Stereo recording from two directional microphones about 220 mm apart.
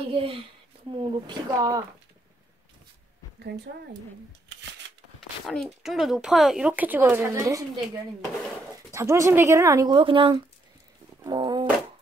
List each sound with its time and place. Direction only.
0.1 s speech: 25° right (ahead or behind)
5.5 s speech: centre (ahead or behind)
8.9 s speech: 15° right (ahead or behind)